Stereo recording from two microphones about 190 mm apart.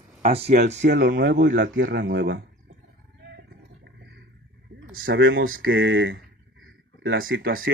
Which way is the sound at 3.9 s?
65° right (ahead or behind).